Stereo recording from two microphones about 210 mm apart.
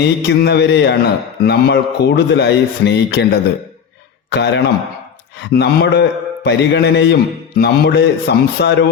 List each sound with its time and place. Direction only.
0.0 s a man's voice: 55° left (ahead or behind)